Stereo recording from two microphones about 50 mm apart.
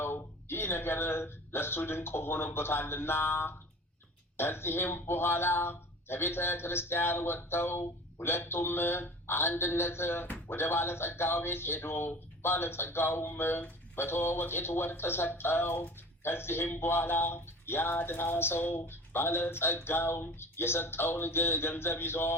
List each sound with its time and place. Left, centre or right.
0.0 s a man's voice: left